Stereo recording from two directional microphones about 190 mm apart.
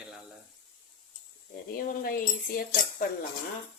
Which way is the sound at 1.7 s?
50° left (ahead or behind).